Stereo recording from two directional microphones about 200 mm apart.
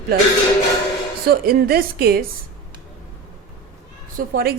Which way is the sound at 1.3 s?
50° right (ahead or behind).